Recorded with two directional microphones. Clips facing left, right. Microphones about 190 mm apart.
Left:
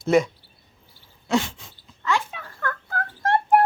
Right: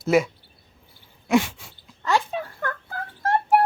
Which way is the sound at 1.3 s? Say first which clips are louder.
Right 3 dB; 10° right (ahead or behind).